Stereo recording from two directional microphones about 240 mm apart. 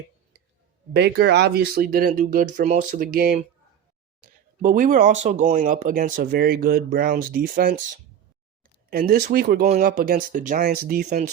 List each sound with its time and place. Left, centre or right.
0.9 s speech: right
8.9 s speech: right